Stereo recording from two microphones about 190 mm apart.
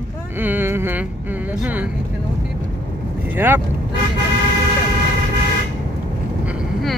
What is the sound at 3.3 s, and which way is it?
Speech, 10° right (ahead or behind).